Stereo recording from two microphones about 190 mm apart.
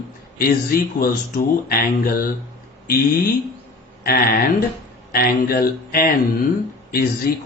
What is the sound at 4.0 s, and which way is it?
A man's voice, 50° left (ahead or behind).